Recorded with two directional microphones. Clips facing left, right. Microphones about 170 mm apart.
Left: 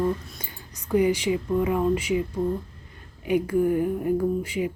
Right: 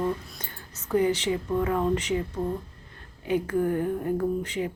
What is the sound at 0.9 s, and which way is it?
Speech, 10° left (ahead or behind).